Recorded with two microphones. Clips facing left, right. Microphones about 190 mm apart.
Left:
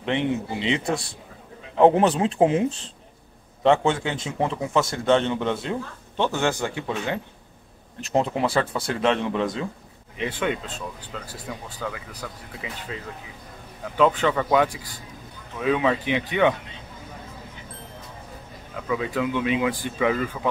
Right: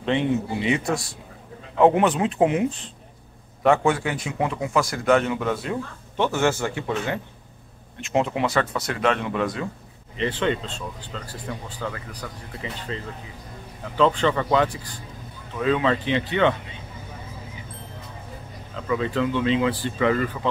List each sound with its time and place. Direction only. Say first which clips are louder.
0.0 s a man's voice: right 2 dB; 20° left (ahead or behind)
4.4 s speech: left 1 dB; 5° right (ahead or behind)
4.7 s a man's voice: even; 25° left (ahead or behind)
8.1 s speech: even; centre (ahead or behind)
8.5 s a man's voice: even; 30° left (ahead or behind)
10.1 s speech: right 2 dB; 10° left (ahead or behind)
18.8 s speech: right 2 dB; 5° left (ahead or behind)